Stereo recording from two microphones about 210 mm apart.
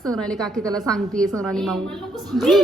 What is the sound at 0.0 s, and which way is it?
A woman's voice, 5° left (ahead or behind).